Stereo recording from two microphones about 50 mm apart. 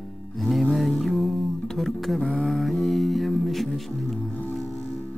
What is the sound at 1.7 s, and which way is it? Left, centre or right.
Speech, centre.